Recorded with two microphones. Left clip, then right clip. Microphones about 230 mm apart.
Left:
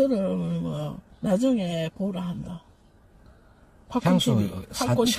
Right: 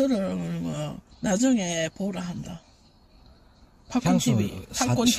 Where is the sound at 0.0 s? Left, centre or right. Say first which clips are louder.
Left 2 dB; right.